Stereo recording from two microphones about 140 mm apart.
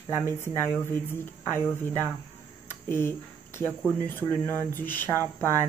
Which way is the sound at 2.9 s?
15° left (ahead or behind).